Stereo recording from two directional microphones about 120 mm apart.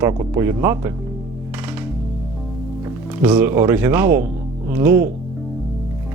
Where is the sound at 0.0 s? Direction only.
25° right (ahead or behind).